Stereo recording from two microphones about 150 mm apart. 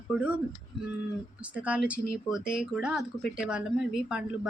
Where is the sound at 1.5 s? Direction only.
10° right (ahead or behind).